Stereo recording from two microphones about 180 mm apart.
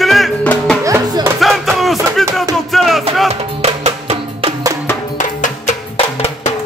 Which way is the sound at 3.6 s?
35° right (ahead or behind).